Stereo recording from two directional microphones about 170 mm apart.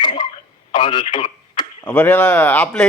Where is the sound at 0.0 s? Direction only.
25° left (ahead or behind).